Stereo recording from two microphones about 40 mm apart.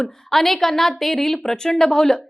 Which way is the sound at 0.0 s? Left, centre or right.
Centre.